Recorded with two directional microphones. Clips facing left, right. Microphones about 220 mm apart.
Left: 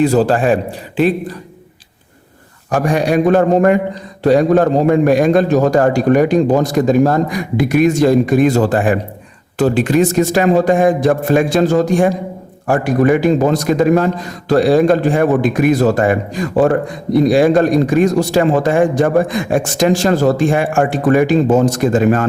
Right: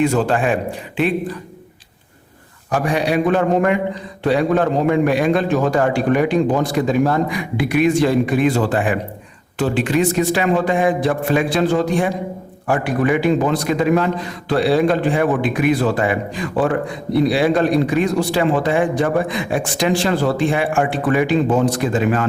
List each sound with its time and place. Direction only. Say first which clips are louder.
0.0 s a man's voice: left 4 dB; 35° left (ahead or behind)
2.6 s a man's voice: left 4 dB; 45° left (ahead or behind)